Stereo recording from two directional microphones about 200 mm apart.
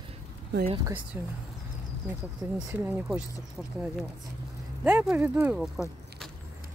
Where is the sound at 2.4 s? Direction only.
10° right (ahead or behind).